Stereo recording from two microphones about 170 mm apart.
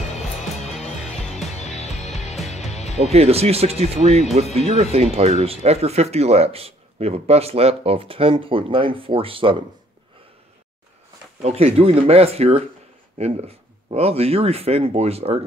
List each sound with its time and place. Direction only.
1.0 s music: centre (ahead or behind)
2.7 s music: 40° left (ahead or behind)
3.0 s speech: 40° right (ahead or behind)
11.4 s speech: 35° right (ahead or behind)